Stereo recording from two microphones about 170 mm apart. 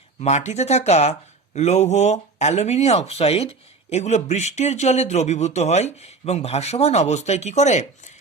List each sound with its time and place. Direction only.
0.2 s speech: 45° left (ahead or behind)